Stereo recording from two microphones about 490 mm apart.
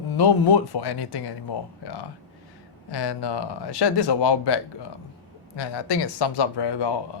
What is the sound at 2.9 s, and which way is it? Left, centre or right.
Speech, left.